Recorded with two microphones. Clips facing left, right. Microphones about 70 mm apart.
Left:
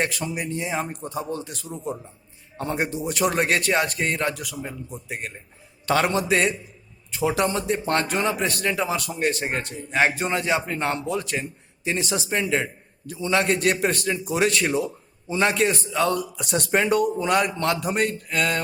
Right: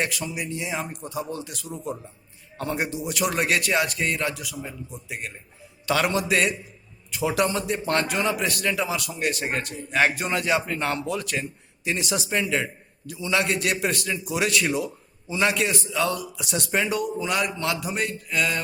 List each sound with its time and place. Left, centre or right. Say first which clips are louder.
0.0 s a man's voice: left 2 dB; left